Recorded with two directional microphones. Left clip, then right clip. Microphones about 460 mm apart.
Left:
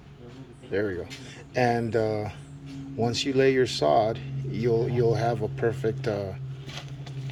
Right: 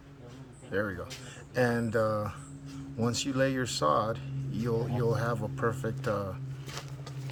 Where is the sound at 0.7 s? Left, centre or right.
Centre.